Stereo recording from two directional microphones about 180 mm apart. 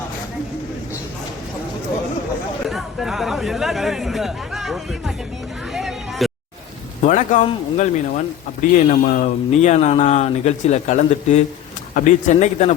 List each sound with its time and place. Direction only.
2.6 s speech: centre (ahead or behind)
5.7 s vehicle: centre (ahead or behind)
7.0 s speech: 40° left (ahead or behind)